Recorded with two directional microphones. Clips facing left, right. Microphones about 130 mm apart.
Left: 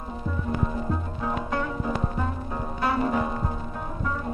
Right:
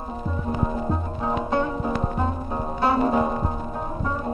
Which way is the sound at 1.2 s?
25° right (ahead or behind).